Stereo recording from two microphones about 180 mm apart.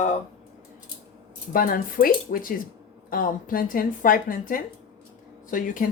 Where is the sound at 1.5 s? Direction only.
50° left (ahead or behind).